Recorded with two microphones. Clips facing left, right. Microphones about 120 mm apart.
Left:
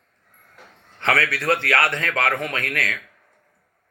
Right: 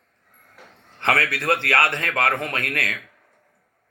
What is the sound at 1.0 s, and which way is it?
Speech, 25° right (ahead or behind).